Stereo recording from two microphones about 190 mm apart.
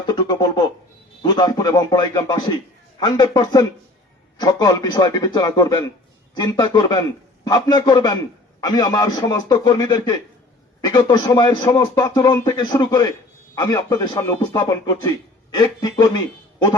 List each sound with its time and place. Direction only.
0.0 s speech: 20° left (ahead or behind)